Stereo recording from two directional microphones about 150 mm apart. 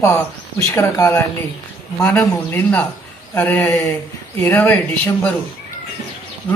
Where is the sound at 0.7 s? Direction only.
20° left (ahead or behind).